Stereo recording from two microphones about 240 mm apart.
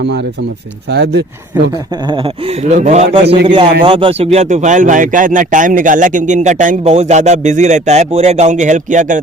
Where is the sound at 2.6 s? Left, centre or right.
Right.